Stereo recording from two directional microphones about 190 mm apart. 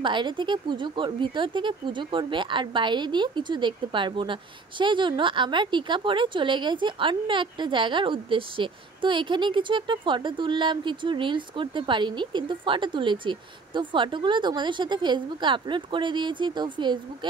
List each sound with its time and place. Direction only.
0.0 s speech: 25° right (ahead or behind)